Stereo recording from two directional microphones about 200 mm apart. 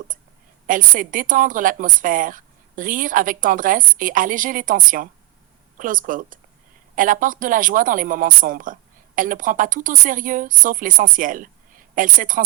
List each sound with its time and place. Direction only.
0.7 s a woman's voice: 40° right (ahead or behind)